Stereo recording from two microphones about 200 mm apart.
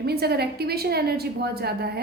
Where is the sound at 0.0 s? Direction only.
55° right (ahead or behind).